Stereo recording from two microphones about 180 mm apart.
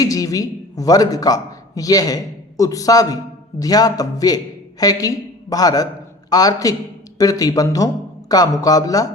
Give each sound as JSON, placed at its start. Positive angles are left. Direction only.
{"t": 0.0, "sound": "a man's voice", "side_deg": 20}